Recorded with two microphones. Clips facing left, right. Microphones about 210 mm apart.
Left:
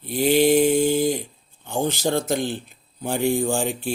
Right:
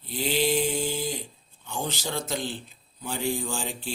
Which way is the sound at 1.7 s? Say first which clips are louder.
Left 9 dB; 50° left (ahead or behind).